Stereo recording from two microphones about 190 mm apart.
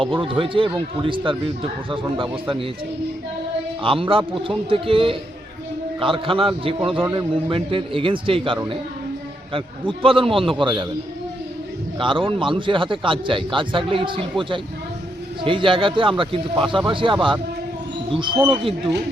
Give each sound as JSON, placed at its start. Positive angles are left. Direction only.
{"t": 0.0, "sound": "a man's voice", "side_deg": -25}
{"t": 3.8, "sound": "a man's voice", "side_deg": -30}
{"t": 7.0, "sound": "speech", "side_deg": -15}
{"t": 7.5, "sound": "a man's voice", "side_deg": -30}
{"t": 11.9, "sound": "a man's voice", "side_deg": -25}